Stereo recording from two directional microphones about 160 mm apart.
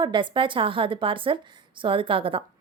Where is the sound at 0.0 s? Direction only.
30° right (ahead or behind).